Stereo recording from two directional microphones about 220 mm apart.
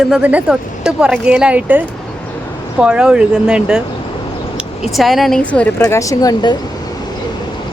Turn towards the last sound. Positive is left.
turn(degrees=20)  # may be behind; listen again after turning